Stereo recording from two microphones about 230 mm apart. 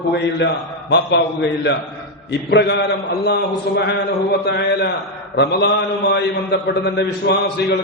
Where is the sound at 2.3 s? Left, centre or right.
Left.